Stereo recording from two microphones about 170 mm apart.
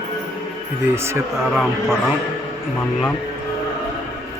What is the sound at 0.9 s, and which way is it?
Speech, 15° right (ahead or behind).